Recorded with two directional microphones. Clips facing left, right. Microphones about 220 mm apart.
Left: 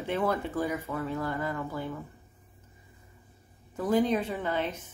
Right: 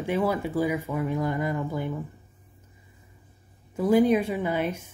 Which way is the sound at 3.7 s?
10° right (ahead or behind).